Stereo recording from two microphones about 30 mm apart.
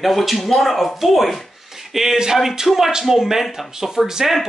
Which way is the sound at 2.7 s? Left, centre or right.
Centre.